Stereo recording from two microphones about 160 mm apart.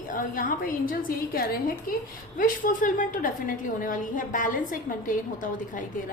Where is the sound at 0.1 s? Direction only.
60° left (ahead or behind).